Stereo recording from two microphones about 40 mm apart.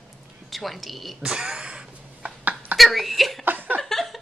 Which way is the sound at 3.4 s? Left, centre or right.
Right.